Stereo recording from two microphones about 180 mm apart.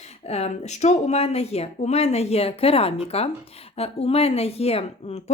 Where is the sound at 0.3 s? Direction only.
35° left (ahead or behind).